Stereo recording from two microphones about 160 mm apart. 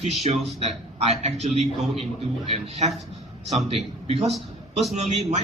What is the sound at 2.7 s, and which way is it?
A man's voice, 45° right (ahead or behind).